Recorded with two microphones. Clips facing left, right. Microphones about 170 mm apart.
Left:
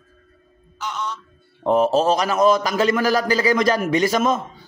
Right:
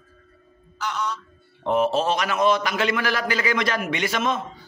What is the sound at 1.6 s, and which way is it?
A man's voice, 40° left (ahead or behind).